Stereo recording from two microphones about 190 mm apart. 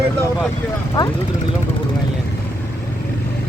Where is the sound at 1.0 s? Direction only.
20° left (ahead or behind).